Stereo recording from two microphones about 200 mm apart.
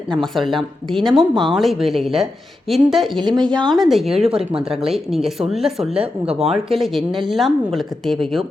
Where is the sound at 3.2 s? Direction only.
20° right (ahead or behind).